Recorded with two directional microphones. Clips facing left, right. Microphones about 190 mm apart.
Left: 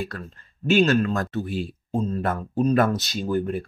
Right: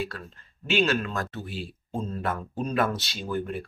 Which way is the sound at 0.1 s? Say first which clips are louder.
Left 4 dB; 45° left (ahead or behind).